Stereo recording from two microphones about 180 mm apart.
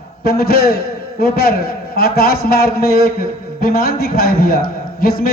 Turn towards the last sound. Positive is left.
turn(degrees=55)  # may be behind; listen again after turning